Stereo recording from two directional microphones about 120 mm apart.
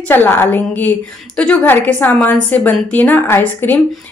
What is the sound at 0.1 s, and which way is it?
A woman's voice, 15° left (ahead or behind).